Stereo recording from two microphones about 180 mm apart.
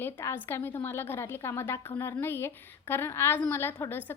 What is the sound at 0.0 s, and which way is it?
A woman's voice, 15° left (ahead or behind).